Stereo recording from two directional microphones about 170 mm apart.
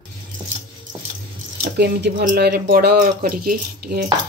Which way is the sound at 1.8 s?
75° right (ahead or behind).